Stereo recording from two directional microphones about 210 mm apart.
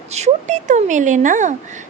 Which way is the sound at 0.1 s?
35° right (ahead or behind).